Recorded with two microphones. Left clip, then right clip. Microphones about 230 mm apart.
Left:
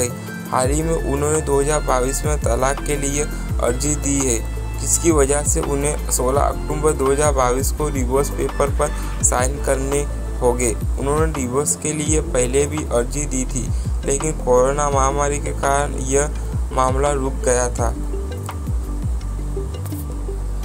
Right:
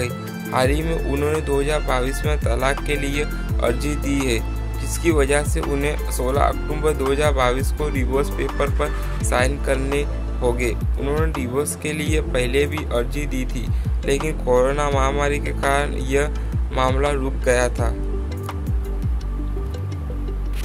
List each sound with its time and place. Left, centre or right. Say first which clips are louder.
0.0 s speech: left 2 dB; centre